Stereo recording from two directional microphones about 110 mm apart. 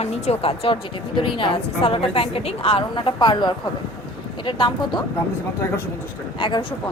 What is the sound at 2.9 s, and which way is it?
Speech, 45° left (ahead or behind).